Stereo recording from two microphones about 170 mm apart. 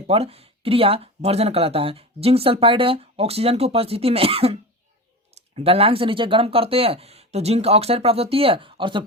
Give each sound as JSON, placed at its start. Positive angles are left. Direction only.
{"t": 0.1, "sound": "speech", "side_deg": -35}